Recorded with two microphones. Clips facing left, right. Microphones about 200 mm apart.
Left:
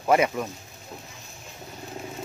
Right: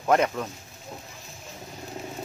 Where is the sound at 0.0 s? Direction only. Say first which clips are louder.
Left 1 dB; 10° left (ahead or behind).